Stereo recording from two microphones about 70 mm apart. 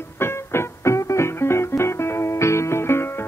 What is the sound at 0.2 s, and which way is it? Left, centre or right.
Music, left.